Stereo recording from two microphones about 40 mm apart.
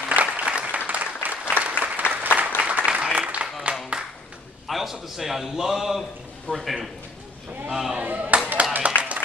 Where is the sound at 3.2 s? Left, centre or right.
Right.